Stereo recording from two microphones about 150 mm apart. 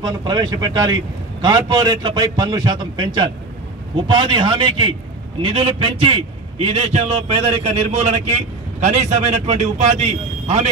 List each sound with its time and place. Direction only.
0.0 s a man's voice: 25° right (ahead or behind); by 10.7 s 50° right (ahead or behind)